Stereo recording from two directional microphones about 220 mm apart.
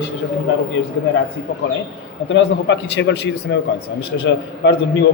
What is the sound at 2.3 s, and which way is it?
A man's voice, 55° left (ahead or behind).